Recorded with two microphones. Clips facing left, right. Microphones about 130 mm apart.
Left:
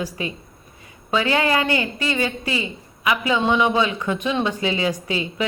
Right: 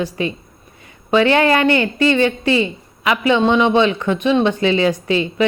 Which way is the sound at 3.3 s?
25° right (ahead or behind).